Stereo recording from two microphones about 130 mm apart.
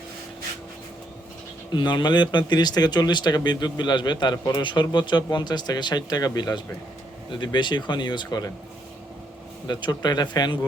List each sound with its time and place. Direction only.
1.7 s speech: 35° left (ahead or behind)
9.6 s speech: 35° left (ahead or behind)